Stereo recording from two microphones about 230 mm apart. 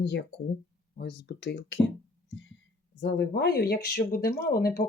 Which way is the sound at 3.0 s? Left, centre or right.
Left.